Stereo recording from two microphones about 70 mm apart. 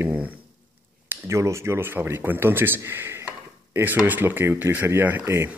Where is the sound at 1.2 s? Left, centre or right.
Right.